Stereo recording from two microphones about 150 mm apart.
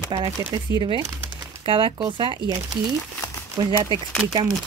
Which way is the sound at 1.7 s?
35° right (ahead or behind).